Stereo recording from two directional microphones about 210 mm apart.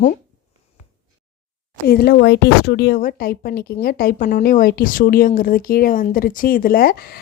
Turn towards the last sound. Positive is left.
turn(degrees=45)  # may be behind; listen again after turning